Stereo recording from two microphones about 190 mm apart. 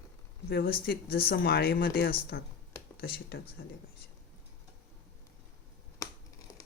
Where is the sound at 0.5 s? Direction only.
55° left (ahead or behind).